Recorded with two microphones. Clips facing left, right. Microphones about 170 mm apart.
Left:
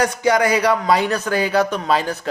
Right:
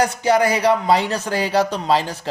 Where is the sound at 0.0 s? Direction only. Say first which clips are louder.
Even; 30° right (ahead or behind).